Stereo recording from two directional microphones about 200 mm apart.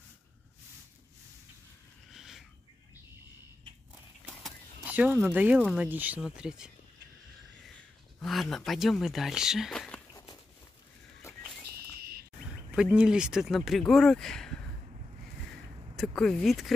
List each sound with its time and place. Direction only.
2.0 s bird: centre (ahead or behind)
3.9 s speech: 5° right (ahead or behind)
8.2 s speech: centre (ahead or behind)
11.2 s a sound: 15° left (ahead or behind)
12.0 s a sound: 50° right (ahead or behind)
12.7 s speech: 5° right (ahead or behind)
16.0 s speech: centre (ahead or behind)